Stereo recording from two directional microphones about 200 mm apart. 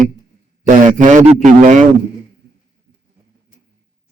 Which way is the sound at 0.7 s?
40° right (ahead or behind).